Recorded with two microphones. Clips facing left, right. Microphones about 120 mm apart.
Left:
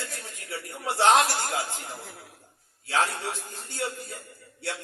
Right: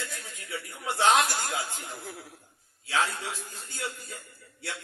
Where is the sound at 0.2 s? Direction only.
35° left (ahead or behind).